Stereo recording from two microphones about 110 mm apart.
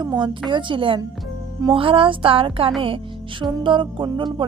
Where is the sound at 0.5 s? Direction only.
50° right (ahead or behind).